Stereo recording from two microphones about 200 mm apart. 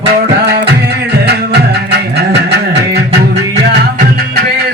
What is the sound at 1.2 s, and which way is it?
Music, 55° right (ahead or behind).